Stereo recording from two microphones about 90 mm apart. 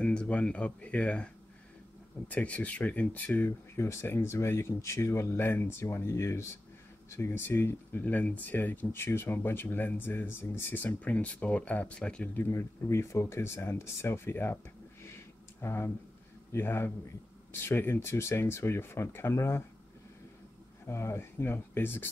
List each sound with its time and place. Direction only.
0.0 s speech: 15° left (ahead or behind)
12.4 s speech: 25° left (ahead or behind)
15.6 s speech: 30° left (ahead or behind)
20.8 s speech: 30° left (ahead or behind)